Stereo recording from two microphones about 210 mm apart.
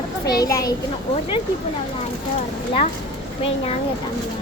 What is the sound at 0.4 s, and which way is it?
Speech, 15° left (ahead or behind).